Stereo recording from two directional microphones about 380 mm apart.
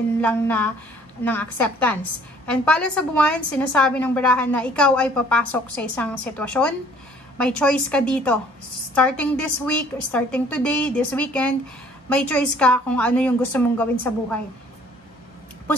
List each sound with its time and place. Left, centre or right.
0.2 s a woman's voice: centre